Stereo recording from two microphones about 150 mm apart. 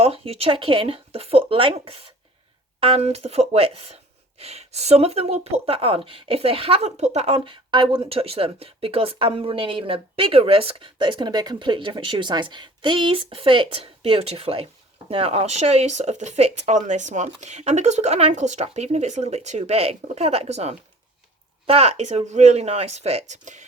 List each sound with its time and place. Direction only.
0.0 s a woman's voice: 40° right (ahead or behind)